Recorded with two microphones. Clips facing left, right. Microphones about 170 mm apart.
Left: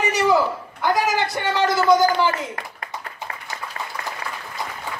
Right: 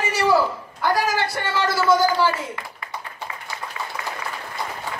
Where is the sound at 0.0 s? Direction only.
20° left (ahead or behind).